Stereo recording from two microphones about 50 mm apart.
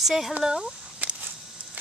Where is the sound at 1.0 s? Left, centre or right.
Right.